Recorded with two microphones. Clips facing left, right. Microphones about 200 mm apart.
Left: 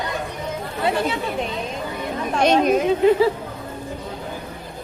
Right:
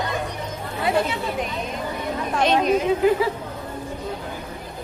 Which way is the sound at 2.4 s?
45° left (ahead or behind).